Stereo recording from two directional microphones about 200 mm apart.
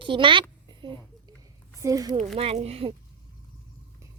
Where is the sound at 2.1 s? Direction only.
30° right (ahead or behind).